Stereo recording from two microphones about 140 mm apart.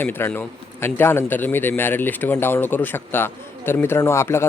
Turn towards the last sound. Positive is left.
turn(degrees=20)  # may be behind; listen again after turning